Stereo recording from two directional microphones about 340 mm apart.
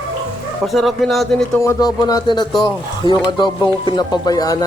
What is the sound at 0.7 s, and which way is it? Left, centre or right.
Speech, centre.